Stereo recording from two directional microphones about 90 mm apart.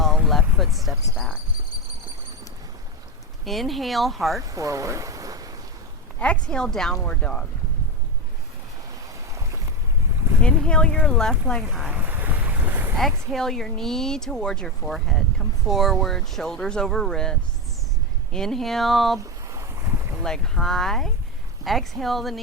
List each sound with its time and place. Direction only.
0.5 s speech: centre (ahead or behind)
3.4 s speech: centre (ahead or behind)
4.4 s speech: 40° right (ahead or behind)
6.1 s speech: 15° left (ahead or behind)
9.3 s a sound: 35° right (ahead or behind)
10.4 s speech: 10° left (ahead or behind)
11.9 s boat: 20° right (ahead or behind)
13.0 s speech: 5° left (ahead or behind)
19.2 s boat: 35° right (ahead or behind)
20.2 s speech: 5° left (ahead or behind)